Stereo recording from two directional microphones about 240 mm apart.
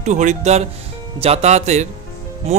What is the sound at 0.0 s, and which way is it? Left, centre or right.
Speech, right.